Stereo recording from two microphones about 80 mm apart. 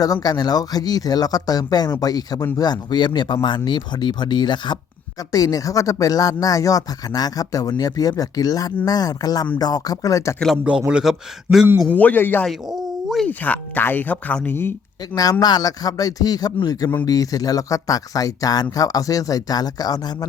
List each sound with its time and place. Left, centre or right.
0.0 s speech: left
5.3 s speech: left
10.6 s a man's voice: centre
11.9 s speech: centre
12.5 s a sound: centre
13.2 s speech: centre
15.1 s speech: left